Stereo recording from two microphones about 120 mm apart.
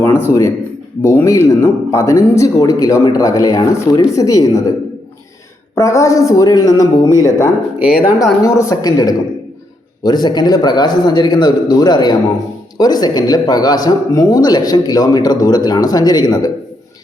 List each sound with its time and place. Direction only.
0.0 s speech: 20° left (ahead or behind)
5.7 s speech: 25° left (ahead or behind)